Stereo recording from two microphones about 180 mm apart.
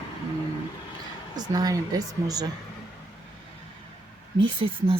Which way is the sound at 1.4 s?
20° right (ahead or behind).